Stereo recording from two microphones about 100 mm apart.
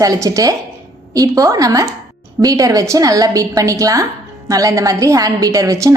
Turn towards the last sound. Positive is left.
turn(degrees=-35)  # may be behind; listen again after turning